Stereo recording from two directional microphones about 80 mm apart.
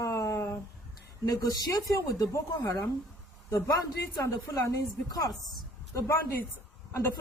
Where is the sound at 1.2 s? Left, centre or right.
Left.